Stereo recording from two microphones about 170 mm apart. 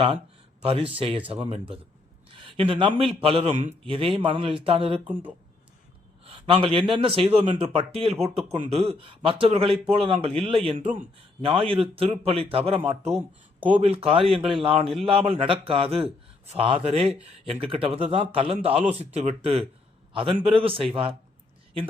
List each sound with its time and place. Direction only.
0.6 s speech: 35° right (ahead or behind)
2.3 s a sound: 30° right (ahead or behind)
3.0 s speech: 35° right (ahead or behind)
6.2 s speech: 35° right (ahead or behind)
13.1 s speech: 10° right (ahead or behind)
13.8 s speech: 35° right (ahead or behind)
17.1 s speech: 5° right (ahead or behind)
17.4 s speech: 35° right (ahead or behind)